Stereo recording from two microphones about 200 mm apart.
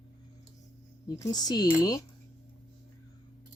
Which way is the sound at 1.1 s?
15° left (ahead or behind).